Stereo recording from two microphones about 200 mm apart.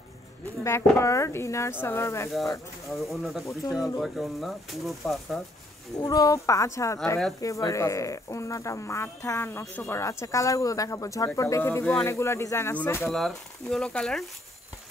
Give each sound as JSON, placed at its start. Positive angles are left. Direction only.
{"t": 0.7, "sound": "speech", "side_deg": 15}
{"t": 2.9, "sound": "speech", "side_deg": 0}
{"t": 5.9, "sound": "speech", "side_deg": 20}